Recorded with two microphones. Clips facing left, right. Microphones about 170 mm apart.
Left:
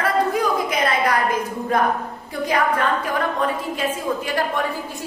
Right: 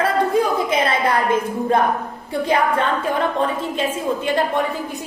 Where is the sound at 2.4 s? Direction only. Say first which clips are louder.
Right 1 dB; 30° right (ahead or behind).